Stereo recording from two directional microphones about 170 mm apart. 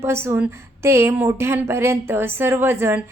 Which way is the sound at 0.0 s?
15° right (ahead or behind).